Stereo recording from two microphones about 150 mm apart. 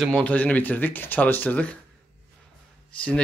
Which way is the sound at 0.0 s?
5° left (ahead or behind).